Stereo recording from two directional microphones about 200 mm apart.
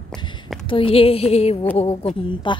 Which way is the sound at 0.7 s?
25° left (ahead or behind).